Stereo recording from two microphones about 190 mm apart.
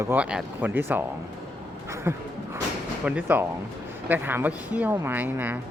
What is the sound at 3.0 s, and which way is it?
Speech, 10° right (ahead or behind).